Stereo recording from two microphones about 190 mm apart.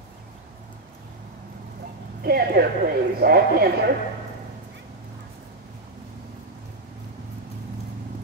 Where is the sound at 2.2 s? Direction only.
55° right (ahead or behind).